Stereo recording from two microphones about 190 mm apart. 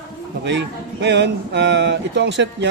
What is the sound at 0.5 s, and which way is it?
Speech, 65° right (ahead or behind).